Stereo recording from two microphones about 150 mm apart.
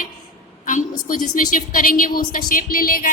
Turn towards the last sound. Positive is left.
turn(degrees=70)  # may be behind; listen again after turning